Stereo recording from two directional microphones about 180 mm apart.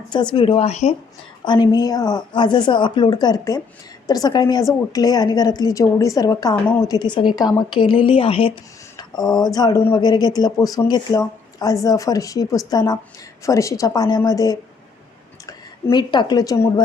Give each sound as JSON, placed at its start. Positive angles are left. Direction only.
{"t": 0.1, "sound": "speech", "side_deg": 25}
{"t": 1.5, "sound": "a woman's voice", "side_deg": 25}